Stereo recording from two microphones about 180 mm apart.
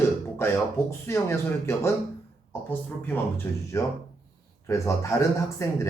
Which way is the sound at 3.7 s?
15° left (ahead or behind).